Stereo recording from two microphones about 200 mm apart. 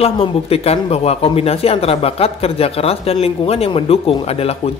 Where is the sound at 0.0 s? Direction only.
30° left (ahead or behind).